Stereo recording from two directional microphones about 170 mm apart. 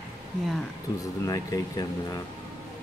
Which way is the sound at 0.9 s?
20° left (ahead or behind).